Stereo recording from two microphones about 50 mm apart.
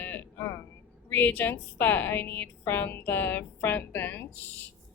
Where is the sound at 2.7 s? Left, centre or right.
Left.